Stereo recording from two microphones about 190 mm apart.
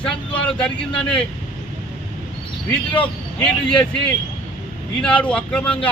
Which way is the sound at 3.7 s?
5° left (ahead or behind).